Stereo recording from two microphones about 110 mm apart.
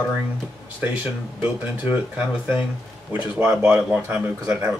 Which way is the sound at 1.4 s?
15° right (ahead or behind).